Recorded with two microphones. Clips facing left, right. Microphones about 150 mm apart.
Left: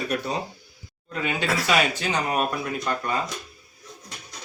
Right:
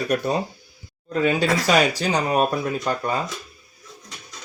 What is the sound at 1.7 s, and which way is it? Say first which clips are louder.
Speech: right 3 dB; 40° right (ahead or behind).